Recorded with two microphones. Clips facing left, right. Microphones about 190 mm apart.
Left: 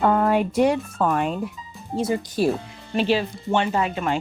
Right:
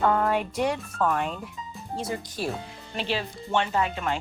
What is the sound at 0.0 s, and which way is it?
Speech, 20° left (ahead or behind).